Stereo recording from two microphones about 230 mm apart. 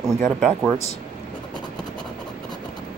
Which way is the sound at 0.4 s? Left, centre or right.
Centre.